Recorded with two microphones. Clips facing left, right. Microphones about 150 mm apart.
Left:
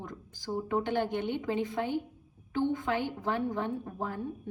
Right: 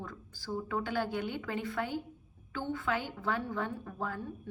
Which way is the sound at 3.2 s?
15° left (ahead or behind).